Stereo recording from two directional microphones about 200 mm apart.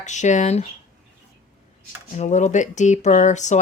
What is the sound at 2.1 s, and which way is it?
Speech, 35° left (ahead or behind).